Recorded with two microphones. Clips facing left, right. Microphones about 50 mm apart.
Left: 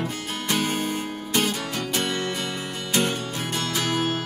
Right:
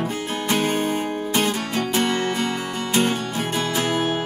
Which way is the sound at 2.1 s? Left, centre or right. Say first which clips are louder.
Right 5 dB; right.